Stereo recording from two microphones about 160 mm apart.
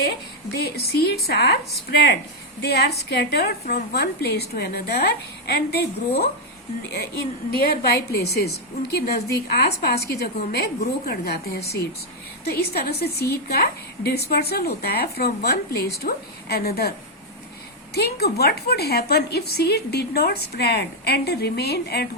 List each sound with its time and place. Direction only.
0.5 s a woman's voice: 85° left
7.5 s a woman's voice: 75° left (ahead or behind)
17.9 s a woman's voice: 85° left